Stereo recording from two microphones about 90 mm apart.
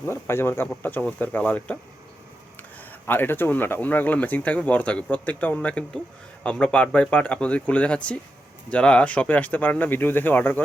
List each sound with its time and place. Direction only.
0.0 s speech: 25° left (ahead or behind)
3.1 s speech: 25° left (ahead or behind)